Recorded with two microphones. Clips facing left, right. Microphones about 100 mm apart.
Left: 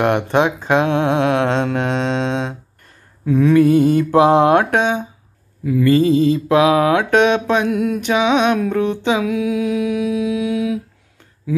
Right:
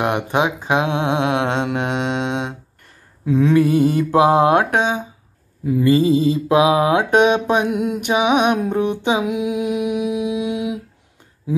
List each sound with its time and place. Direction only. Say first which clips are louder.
0.0 s speech: left 3 dB; 15° right (ahead or behind)
3.3 s mantra: left 2 dB; 25° right (ahead or behind)
3.6 s mantra: left 3 dB; 40° left (ahead or behind)
4.1 s mantra: left 1 dB; 20° right (ahead or behind)